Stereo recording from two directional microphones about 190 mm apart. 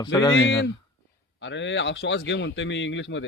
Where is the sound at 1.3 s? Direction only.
75° left (ahead or behind).